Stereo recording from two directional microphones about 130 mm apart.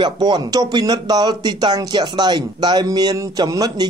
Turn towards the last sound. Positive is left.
turn(degrees=-30)  # may be behind; listen again after turning